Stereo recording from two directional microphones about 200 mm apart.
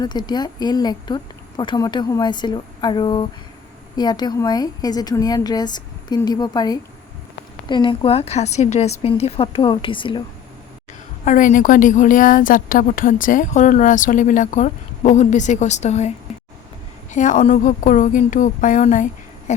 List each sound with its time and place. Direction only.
0.0 s speech: 20° left (ahead or behind)
11.3 s a woman's voice: 40° left (ahead or behind)